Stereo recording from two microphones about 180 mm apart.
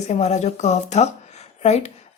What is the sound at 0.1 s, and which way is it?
Speech, 40° left (ahead or behind).